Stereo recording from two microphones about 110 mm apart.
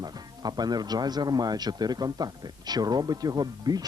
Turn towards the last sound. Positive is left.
turn(degrees=-35)  # may be behind; listen again after turning